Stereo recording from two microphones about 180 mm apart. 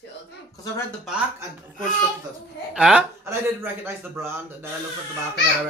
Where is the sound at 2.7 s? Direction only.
5° right (ahead or behind).